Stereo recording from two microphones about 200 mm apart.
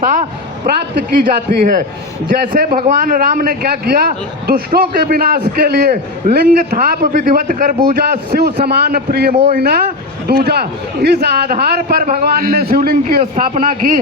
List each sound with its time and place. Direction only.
0.0 s vehicle: 40° right (ahead or behind)
1.2 s a man's voice: 45° right (ahead or behind)